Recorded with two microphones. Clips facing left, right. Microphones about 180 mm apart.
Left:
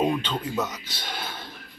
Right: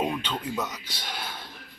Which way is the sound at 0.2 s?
10° right (ahead or behind).